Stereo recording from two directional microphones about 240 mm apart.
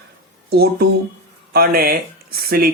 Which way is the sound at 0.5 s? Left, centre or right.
Right.